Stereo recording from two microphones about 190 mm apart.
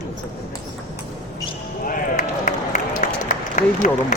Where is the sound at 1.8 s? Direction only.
45° left (ahead or behind).